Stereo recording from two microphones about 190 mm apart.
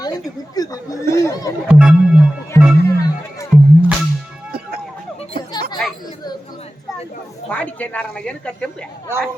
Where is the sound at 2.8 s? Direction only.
15° left (ahead or behind).